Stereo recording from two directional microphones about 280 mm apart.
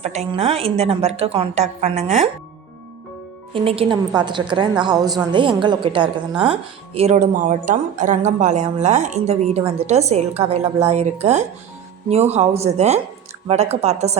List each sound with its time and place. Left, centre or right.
0.0 s speech: right
3.5 s a woman's voice: centre